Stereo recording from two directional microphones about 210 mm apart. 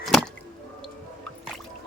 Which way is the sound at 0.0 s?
Centre (ahead or behind).